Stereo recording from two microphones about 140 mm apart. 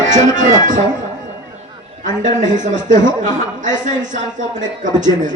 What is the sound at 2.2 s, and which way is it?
Speech, 65° right (ahead or behind).